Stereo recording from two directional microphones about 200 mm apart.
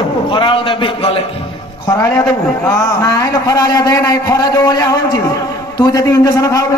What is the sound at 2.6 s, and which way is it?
A man's voice, 15° left (ahead or behind).